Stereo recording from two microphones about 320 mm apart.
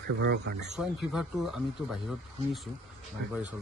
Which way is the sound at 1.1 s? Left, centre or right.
Centre.